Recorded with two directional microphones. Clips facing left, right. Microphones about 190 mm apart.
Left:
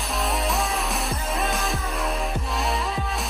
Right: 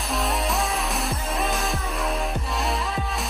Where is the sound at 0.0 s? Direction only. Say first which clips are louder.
Even; centre (ahead or behind).